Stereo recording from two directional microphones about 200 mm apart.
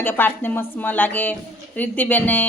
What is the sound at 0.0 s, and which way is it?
A woman's voice, 10° left (ahead or behind).